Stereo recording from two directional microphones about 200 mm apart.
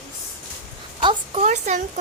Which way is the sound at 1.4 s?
35° right (ahead or behind).